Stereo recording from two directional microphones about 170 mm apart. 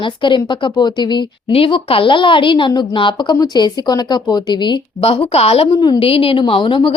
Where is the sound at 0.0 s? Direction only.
30° left (ahead or behind).